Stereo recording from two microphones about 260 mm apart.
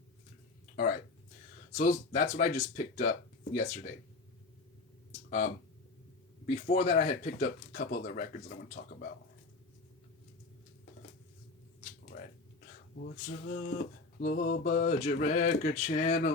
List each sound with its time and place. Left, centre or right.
0.8 s speech: left
6.4 s speech: left
12.1 s a sound: left
13.2 s speech: left
14.8 s speech: left